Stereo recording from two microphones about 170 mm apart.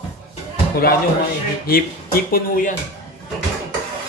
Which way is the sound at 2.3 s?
55° left (ahead or behind).